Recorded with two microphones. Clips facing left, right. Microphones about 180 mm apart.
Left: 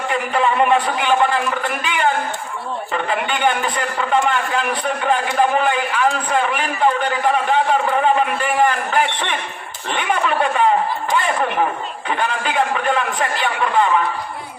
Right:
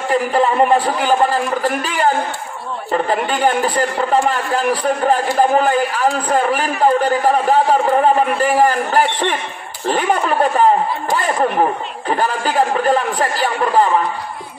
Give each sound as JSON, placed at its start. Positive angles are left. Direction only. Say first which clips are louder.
{"t": 0.1, "sound": "a man's voice", "louder": "right 4 dB", "side_deg": -35}